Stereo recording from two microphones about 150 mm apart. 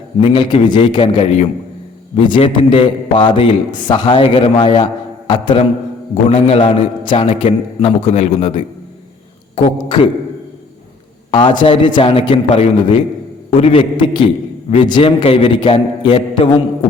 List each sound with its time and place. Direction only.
0.2 s a man's voice: 35° left (ahead or behind)
11.3 s a man's voice: 30° left (ahead or behind)